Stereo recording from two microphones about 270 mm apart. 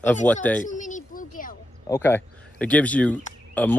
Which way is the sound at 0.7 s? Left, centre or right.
Left.